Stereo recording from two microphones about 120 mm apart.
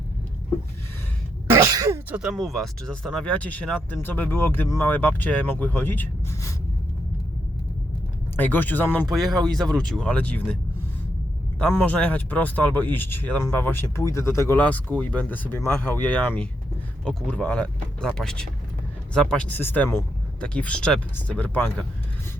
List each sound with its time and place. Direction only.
1.5 s throat clearing: 30° right (ahead or behind)
2.0 s speech: 10° right (ahead or behind); by 6.5 s 20° left (ahead or behind)
8.4 s speech: 15° left (ahead or behind)
9.2 s speech: 35° right (ahead or behind)
9.8 s speech: 5° left (ahead or behind)
11.7 s speech: 15° left (ahead or behind)